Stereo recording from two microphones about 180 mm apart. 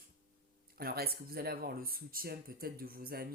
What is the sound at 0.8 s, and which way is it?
Speech, 55° right (ahead or behind).